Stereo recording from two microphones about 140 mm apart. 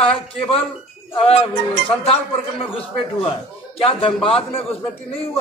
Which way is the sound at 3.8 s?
40° left (ahead or behind).